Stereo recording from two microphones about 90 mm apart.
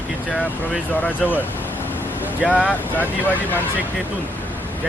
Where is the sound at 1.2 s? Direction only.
Centre (ahead or behind).